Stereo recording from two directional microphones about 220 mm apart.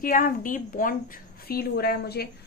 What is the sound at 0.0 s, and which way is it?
A woman's voice, 40° left (ahead or behind).